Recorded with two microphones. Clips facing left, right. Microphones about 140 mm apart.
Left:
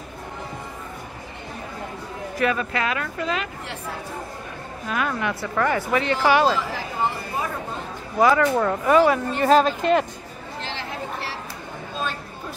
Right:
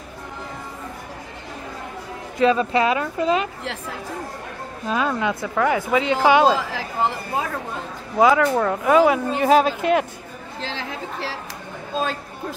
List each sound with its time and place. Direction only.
2.3 s speech: 20° right (ahead or behind)
4.8 s speech: 25° right (ahead or behind)
5.6 s speech: 10° right (ahead or behind)
6.5 s speech: 90° right
8.2 s speech: 5° right (ahead or behind)